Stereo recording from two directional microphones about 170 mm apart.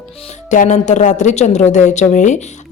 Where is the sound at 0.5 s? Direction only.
45° left (ahead or behind).